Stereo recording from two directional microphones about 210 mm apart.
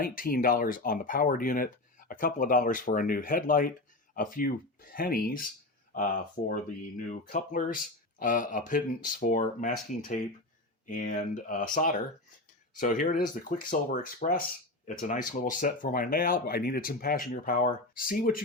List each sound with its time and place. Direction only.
0.0 s speech: 45° left (ahead or behind)